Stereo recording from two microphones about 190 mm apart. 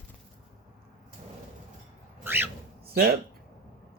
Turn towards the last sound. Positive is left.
turn(degrees=-55)  # may be behind; listen again after turning